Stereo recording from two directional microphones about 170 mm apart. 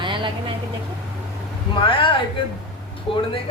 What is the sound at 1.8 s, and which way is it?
Speech, 30° left (ahead or behind).